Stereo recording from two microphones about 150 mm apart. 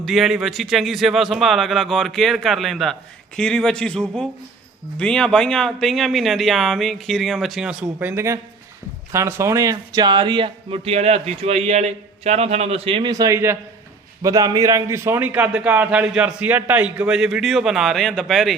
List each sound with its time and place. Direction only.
0.0 s a man's voice: centre (ahead or behind)